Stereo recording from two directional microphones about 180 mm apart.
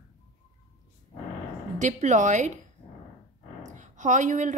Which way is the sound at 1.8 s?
40° right (ahead or behind).